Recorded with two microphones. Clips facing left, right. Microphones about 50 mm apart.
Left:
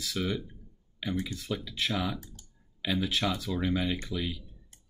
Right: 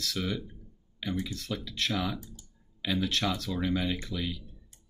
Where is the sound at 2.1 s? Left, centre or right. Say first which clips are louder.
Right 1 dB; left.